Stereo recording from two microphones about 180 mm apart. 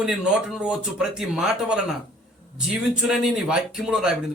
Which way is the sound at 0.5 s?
5° right (ahead or behind).